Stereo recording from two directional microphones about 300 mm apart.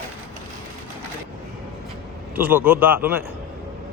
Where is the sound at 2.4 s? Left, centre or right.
Centre.